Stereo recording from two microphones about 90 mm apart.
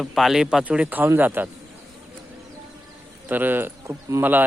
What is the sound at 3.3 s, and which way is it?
Speech, 20° right (ahead or behind).